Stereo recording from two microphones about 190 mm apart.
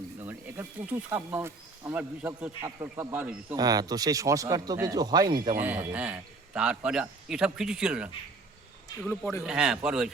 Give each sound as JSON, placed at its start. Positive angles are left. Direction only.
{"t": 0.2, "sound": "speech", "side_deg": -10}
{"t": 5.5, "sound": "a man's voice", "side_deg": -10}
{"t": 9.4, "sound": "a man's voice", "side_deg": -5}